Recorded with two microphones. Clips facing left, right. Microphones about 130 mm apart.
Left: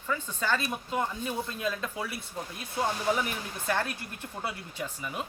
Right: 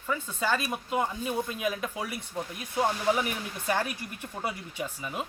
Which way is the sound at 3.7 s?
15° right (ahead or behind).